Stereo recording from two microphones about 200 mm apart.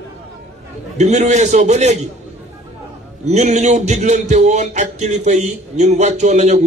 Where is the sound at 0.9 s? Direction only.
35° right (ahead or behind).